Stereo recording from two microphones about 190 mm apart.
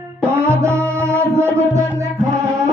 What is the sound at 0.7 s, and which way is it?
Music, 5° left (ahead or behind).